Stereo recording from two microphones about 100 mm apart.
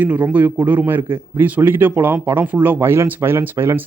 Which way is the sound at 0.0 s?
15° right (ahead or behind).